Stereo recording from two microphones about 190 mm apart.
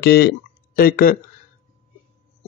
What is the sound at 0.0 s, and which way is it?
Speech, 60° left (ahead or behind).